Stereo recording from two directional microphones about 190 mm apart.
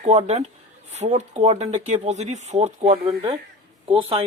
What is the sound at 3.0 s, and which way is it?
A man's voice, 25° right (ahead or behind).